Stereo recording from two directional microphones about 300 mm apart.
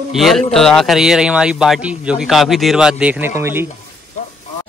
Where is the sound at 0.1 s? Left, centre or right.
Centre.